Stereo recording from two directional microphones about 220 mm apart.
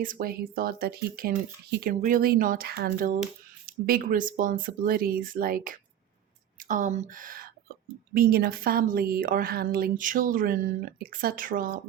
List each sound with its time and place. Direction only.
0.0 s speech: 40° right (ahead or behind)